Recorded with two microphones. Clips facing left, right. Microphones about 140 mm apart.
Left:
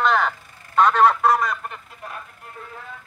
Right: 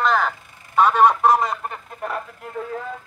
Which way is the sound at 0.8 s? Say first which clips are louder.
Right 1 dB; 10° right (ahead or behind).